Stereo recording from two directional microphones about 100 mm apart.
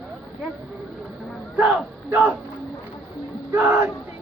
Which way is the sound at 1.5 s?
10° right (ahead or behind).